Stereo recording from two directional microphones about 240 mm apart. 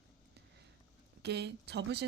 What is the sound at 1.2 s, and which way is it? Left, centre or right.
Speech, right.